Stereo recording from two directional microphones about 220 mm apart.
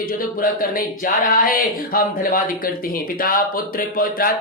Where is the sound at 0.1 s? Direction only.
40° left (ahead or behind).